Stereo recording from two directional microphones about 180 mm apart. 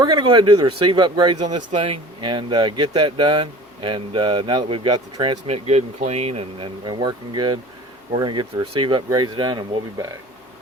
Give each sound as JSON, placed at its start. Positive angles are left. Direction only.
{"t": 0.0, "sound": "speech", "side_deg": -25}
{"t": 5.5, "sound": "speech", "side_deg": -35}